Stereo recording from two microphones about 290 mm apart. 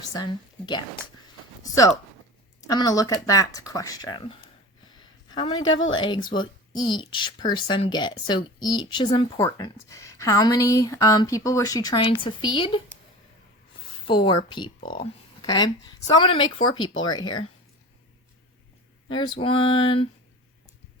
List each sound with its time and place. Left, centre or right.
0.0 s a woman's voice: centre
5.7 s a woman's voice: left
6.0 s speech: centre
14.1 s speech: centre
19.0 s speech: centre